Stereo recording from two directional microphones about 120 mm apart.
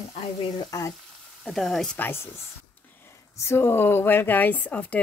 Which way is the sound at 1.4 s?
5° left (ahead or behind).